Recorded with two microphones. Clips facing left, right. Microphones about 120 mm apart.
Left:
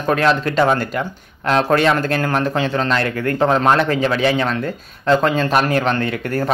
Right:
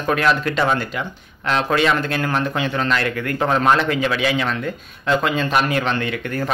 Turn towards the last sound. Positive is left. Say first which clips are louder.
# left 3 dB
turn(degrees=40)  # may be behind; listen again after turning